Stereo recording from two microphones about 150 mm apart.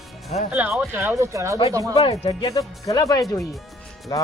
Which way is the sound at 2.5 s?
25° left (ahead or behind).